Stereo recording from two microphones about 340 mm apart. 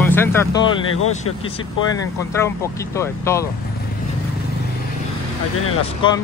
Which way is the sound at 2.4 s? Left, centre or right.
Centre.